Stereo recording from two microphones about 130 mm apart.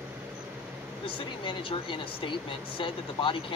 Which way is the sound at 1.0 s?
45° left (ahead or behind).